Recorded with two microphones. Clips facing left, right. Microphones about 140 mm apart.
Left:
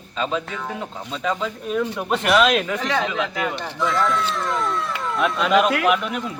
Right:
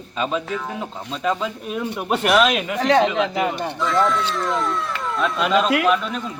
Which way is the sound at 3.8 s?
Centre (ahead or behind).